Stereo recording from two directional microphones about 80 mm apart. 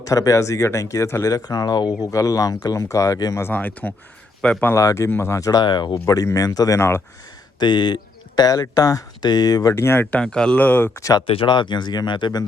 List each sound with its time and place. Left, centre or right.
0.1 s speech: left
1.3 s speech: left
3.5 s speech: left
4.7 s speech: left
5.5 s speech: left
5.9 s speech: left
6.7 s speech: left
7.6 s speech: left
9.7 s speech: left
10.1 s speech: centre
10.6 s speech: left
11.3 s speech: left